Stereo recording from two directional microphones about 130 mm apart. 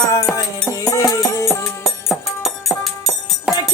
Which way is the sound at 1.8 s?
Centre (ahead or behind).